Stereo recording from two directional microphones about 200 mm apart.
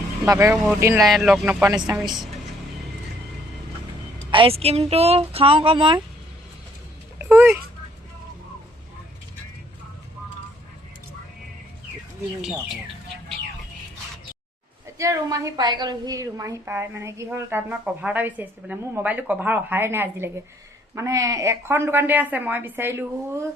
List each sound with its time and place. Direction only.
0.3 s a woman's voice: 15° right (ahead or behind)
0.9 s speech: centre (ahead or behind)
1.7 s speech: 20° right (ahead or behind)
4.3 s speech: 25° right (ahead or behind)
7.2 s speech: 10° right (ahead or behind)
12.4 s speech: centre (ahead or behind)
14.9 s a woman's voice: 15° right (ahead or behind)